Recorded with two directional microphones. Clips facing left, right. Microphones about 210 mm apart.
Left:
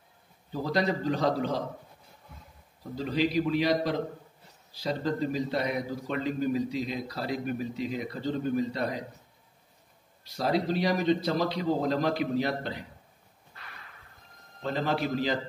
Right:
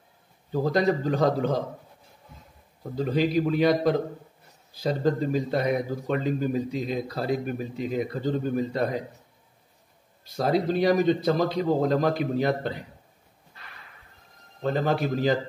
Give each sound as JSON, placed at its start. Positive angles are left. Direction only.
{"t": 0.7, "sound": "speech", "side_deg": -50}
{"t": 3.0, "sound": "speech", "side_deg": -50}
{"t": 5.0, "sound": "speech", "side_deg": -50}
{"t": 10.4, "sound": "speech", "side_deg": -50}
{"t": 14.6, "sound": "speech", "side_deg": -50}